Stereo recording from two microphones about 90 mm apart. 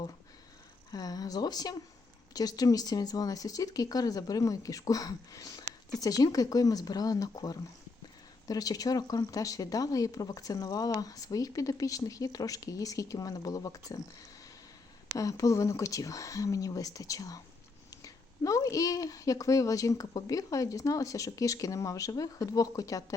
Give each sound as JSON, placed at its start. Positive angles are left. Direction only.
{"t": 0.9, "sound": "a woman's voice", "side_deg": 45}
{"t": 15.2, "sound": "a woman's voice", "side_deg": 40}